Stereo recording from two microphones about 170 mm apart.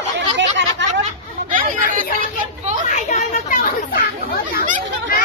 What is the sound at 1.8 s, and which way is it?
Chatter, 50° right (ahead or behind).